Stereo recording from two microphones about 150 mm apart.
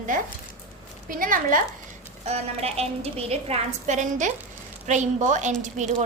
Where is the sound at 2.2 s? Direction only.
45° right (ahead or behind).